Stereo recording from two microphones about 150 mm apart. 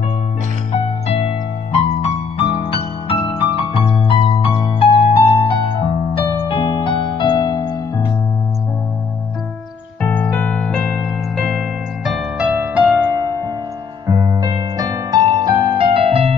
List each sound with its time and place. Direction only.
1.0 s music: 45° left (ahead or behind)
2.6 s music: 40° left (ahead or behind)
6.4 s electric piano: 35° left (ahead or behind)
10.0 s music: 15° left (ahead or behind); by 16.3 s 40° right (ahead or behind)